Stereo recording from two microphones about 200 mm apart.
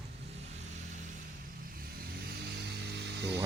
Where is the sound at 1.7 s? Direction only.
50° right (ahead or behind).